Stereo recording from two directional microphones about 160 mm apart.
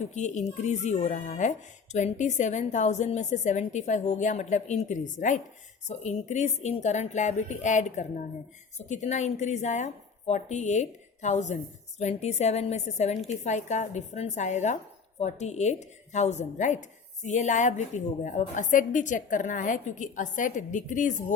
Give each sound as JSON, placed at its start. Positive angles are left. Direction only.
{"t": 0.0, "sound": "speech", "side_deg": 45}